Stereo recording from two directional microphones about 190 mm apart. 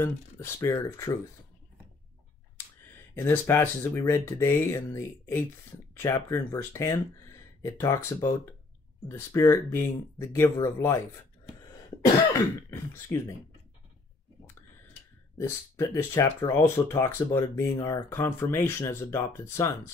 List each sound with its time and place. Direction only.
0.0 s speech: 15° left (ahead or behind)
3.2 s speech: 10° left (ahead or behind)
12.7 s speech: 15° left (ahead or behind)
15.3 s speech: 15° left (ahead or behind)